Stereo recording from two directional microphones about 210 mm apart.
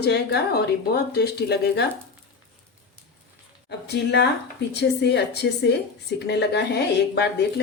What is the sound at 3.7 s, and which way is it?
A woman's voice, 55° left (ahead or behind).